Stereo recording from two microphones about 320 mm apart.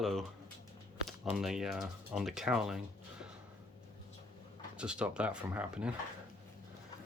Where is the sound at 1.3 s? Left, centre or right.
Centre.